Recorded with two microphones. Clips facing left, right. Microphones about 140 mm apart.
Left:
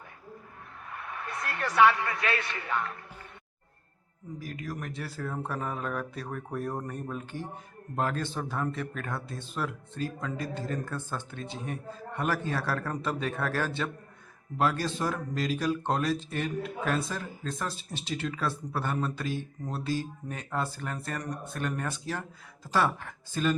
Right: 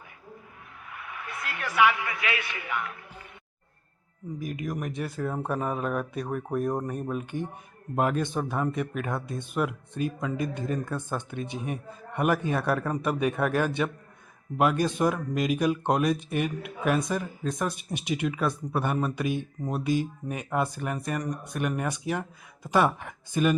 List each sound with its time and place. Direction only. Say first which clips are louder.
0.9 s a man's voice: left 1 dB; 40° left (ahead or behind)
4.4 s speech: right 5 dB; 20° right (ahead or behind)